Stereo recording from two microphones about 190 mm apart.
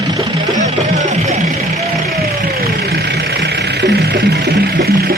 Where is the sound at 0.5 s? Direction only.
40° right (ahead or behind).